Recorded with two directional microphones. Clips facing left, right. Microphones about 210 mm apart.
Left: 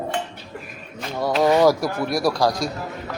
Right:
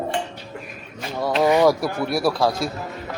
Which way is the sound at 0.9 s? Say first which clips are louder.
Even; centre (ahead or behind).